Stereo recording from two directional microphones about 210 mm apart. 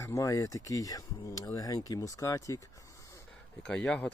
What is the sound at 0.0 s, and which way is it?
Speech, 15° left (ahead or behind).